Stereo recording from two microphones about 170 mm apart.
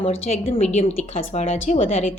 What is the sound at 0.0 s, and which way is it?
A woman's voice, 35° left (ahead or behind).